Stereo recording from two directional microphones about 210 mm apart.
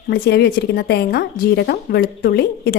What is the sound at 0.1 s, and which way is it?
Speech, 50° left (ahead or behind).